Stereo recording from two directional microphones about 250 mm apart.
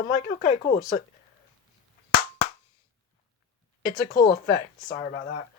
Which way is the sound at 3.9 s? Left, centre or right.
Left.